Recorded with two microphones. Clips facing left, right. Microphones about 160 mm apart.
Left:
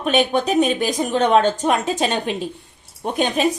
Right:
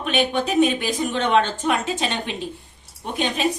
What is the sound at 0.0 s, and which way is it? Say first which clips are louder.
A woman's voice: left 4 dB; 40° left (ahead or behind).